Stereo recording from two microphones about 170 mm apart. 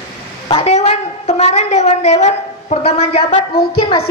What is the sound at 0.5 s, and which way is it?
A woman's voice, 35° left (ahead or behind).